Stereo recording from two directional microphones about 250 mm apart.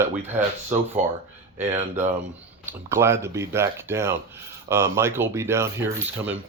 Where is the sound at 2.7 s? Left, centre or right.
Centre.